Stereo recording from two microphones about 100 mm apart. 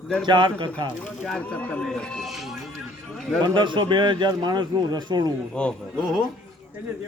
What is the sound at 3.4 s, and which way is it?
A man's voice, 50° right (ahead or behind).